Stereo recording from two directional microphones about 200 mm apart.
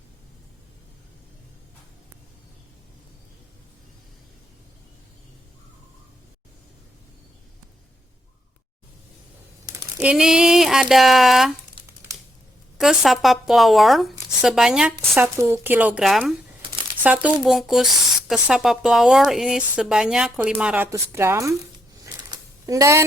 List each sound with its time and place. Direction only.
10.0 s speech: 5° right (ahead or behind)
11.8 s crumpling: 25° right (ahead or behind)
12.7 s speech: centre (ahead or behind)
22.0 s a sound: 15° right (ahead or behind)